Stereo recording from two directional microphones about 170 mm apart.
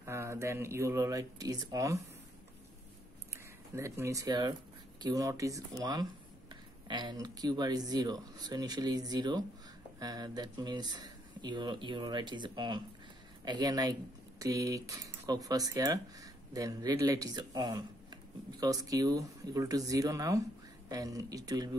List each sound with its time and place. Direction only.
0.0 s speech: 15° right (ahead or behind)
3.7 s speech: 15° right (ahead or behind)